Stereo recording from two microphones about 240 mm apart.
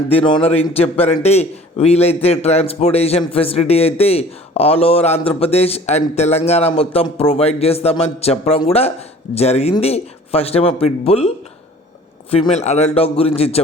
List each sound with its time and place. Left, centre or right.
0.1 s a man's voice: left
12.3 s a man's voice: left